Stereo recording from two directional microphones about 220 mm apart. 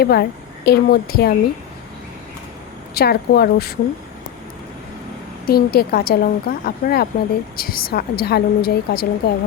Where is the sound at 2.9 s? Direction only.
45° left (ahead or behind).